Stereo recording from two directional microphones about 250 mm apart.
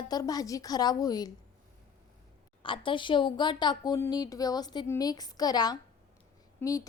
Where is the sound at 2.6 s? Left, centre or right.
Centre.